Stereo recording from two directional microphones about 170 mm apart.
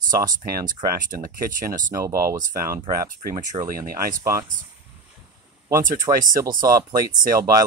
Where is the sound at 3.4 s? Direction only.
50° right (ahead or behind).